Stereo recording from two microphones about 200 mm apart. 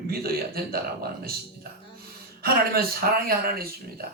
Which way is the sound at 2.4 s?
50° right (ahead or behind).